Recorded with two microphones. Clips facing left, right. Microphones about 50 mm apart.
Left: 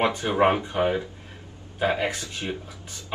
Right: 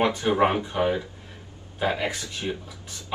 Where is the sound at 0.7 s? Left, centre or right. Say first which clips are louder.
Left 1 dB; left.